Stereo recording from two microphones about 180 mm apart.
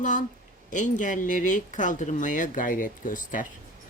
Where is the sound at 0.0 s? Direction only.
45° left (ahead or behind).